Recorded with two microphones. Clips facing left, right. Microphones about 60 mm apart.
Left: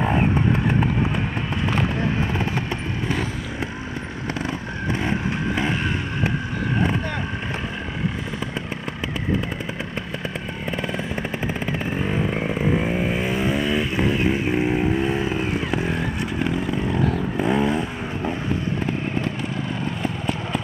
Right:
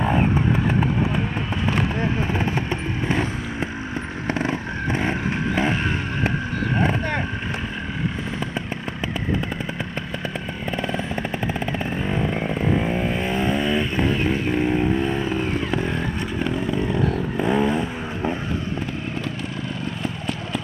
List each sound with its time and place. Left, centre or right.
0.0 s vehicle: centre
4.3 s vehicle: right
10.8 s jackhammer: centre
11.6 s vehicle: centre
20.0 s vehicle: left